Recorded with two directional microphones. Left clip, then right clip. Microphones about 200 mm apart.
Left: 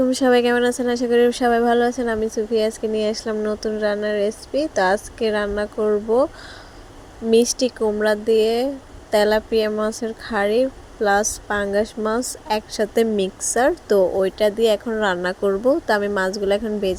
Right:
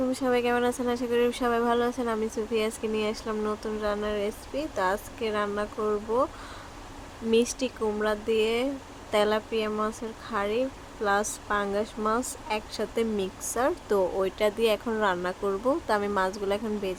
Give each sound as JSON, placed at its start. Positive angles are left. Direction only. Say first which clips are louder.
{"t": 0.1, "sound": "speech", "louder": "left 9 dB", "side_deg": 30}
{"t": 7.3, "sound": "speech", "louder": "left 8 dB", "side_deg": 20}